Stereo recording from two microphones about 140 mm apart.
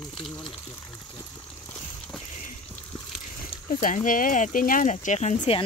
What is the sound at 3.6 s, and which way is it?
Speech, 65° left (ahead or behind).